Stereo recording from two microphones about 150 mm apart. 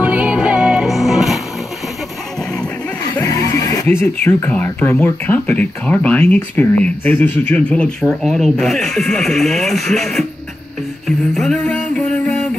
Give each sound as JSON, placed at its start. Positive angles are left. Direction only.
{"t": 0.0, "sound": "music", "side_deg": -10}
{"t": 3.1, "sound": "music", "side_deg": 25}
{"t": 4.3, "sound": "speech", "side_deg": 15}
{"t": 11.3, "sound": "music", "side_deg": 5}